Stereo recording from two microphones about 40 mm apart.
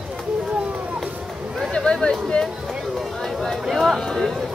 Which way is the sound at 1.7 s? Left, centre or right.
Left.